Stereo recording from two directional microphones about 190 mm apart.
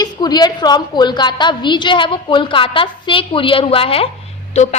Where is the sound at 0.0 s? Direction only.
20° left (ahead or behind).